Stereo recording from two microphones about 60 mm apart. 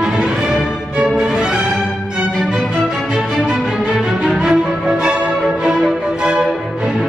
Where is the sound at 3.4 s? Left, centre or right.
Centre.